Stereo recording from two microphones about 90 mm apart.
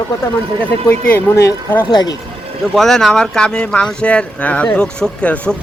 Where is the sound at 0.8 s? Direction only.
20° left (ahead or behind).